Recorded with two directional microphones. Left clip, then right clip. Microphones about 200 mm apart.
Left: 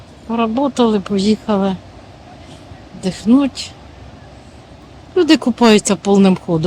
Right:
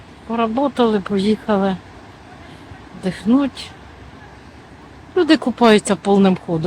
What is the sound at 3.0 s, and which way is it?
Speech, 10° left (ahead or behind).